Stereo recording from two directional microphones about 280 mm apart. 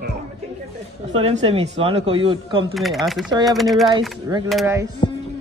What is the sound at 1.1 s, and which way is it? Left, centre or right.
Speech, right.